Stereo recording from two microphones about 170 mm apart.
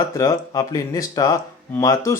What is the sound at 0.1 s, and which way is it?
Speech, 20° left (ahead or behind).